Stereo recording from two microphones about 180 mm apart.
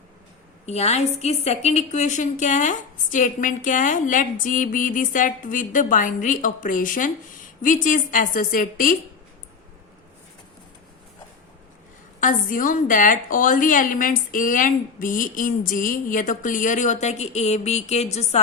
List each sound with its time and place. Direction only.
0.6 s a woman's voice: 35° left (ahead or behind)
12.2 s a woman's voice: 45° left (ahead or behind)